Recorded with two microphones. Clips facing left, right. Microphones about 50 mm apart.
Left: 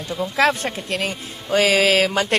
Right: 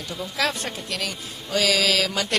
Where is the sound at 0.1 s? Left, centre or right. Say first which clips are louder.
Left 8 dB; left.